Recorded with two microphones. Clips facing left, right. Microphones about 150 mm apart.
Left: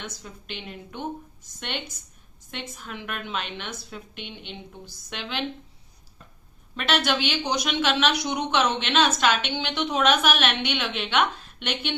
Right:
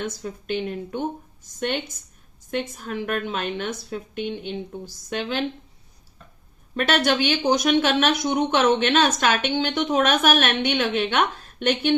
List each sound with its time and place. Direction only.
0.0 s speech: 45° right (ahead or behind)
6.7 s speech: 45° right (ahead or behind)